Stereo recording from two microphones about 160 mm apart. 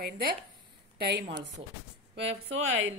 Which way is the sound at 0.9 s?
90° right.